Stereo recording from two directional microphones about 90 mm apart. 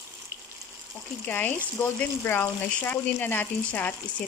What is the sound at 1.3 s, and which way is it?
Speech, 20° left (ahead or behind).